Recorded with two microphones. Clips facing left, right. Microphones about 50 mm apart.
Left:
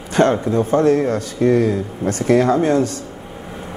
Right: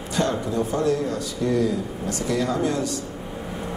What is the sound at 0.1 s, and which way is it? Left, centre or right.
A man's voice, left.